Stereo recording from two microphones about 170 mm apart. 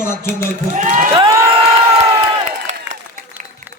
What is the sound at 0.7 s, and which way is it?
Speech, 45° right (ahead or behind).